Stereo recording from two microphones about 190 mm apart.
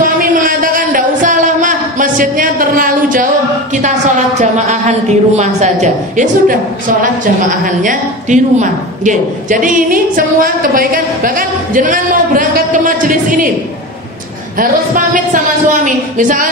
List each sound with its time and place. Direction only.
0.0 s a sound: 45° right (ahead or behind)
4.4 s a woman's voice: 40° right (ahead or behind)
15.1 s a woman's voice: 45° right (ahead or behind)